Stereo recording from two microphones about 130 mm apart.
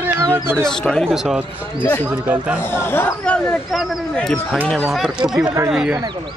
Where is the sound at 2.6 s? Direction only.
20° left (ahead or behind).